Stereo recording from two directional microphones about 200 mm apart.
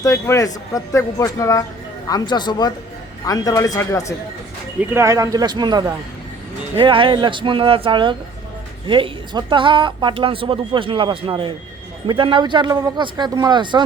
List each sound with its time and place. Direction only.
0.0 s speech: 15° left (ahead or behind)
4.8 s speech: 10° right (ahead or behind)